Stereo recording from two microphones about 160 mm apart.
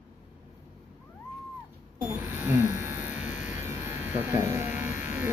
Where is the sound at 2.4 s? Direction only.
15° right (ahead or behind).